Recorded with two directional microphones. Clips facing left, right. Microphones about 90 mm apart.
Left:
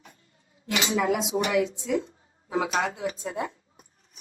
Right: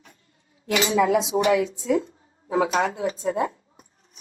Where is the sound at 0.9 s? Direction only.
30° right (ahead or behind).